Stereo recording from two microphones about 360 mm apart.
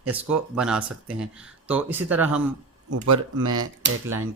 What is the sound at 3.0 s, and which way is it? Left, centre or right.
Speech, right.